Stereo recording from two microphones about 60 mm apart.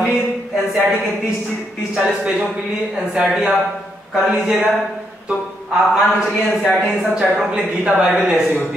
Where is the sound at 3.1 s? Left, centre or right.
Centre.